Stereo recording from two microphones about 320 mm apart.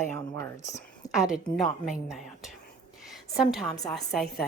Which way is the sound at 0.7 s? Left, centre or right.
Centre.